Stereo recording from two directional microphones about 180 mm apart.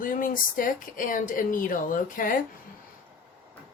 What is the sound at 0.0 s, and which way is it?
Speech, 50° left (ahead or behind).